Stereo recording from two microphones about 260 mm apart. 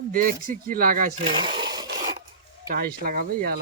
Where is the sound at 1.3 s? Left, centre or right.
Centre.